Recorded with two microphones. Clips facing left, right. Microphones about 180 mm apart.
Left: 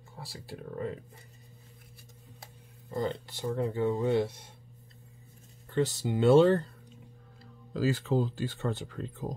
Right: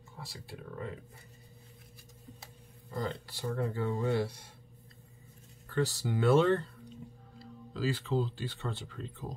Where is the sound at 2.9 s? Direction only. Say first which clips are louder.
Left 4 dB; 20° left (ahead or behind).